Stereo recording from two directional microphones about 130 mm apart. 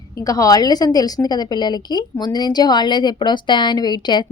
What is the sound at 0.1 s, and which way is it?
A woman's voice, 25° left (ahead or behind).